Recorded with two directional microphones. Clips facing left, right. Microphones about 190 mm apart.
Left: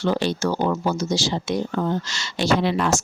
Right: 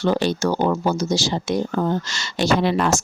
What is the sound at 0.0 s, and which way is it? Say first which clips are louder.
Speech: right 2 dB; 45° right (ahead or behind).